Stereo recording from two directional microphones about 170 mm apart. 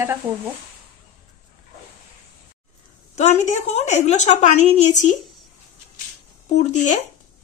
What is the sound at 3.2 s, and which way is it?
A woman's voice, 40° left (ahead or behind).